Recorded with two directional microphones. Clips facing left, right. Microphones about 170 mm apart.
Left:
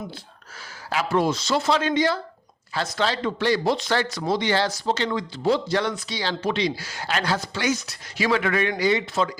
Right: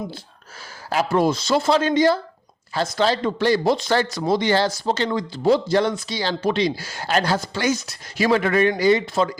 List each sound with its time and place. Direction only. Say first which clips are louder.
0.9 s speech: right 3 dB; 45° right (ahead or behind)
1.6 s speech: right 5 dB; 40° right (ahead or behind)